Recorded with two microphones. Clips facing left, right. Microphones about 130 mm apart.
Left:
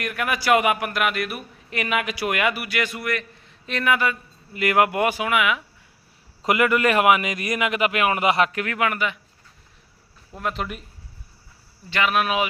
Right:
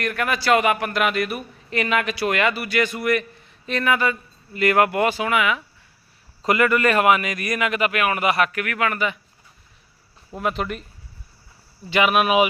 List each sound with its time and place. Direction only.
0.0 s a man's voice: 10° left (ahead or behind)
8.9 s a man's voice: centre (ahead or behind)
10.3 s a man's voice: centre (ahead or behind)
11.9 s speech: 15° right (ahead or behind)